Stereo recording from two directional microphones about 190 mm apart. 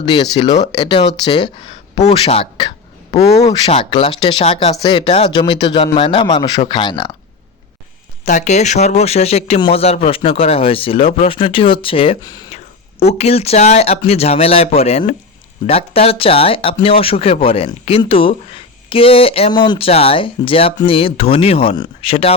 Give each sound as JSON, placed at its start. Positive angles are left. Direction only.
{"t": 0.0, "sound": "speech", "side_deg": 25}
{"t": 8.2, "sound": "speech", "side_deg": 40}
{"t": 13.0, "sound": "speech", "side_deg": 35}